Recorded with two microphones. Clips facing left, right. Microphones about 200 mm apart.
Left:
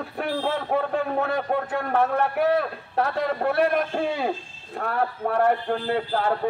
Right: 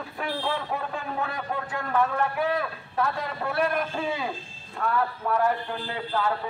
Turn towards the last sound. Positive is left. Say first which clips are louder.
# left 4 dB
turn(degrees=50)  # may be behind; listen again after turning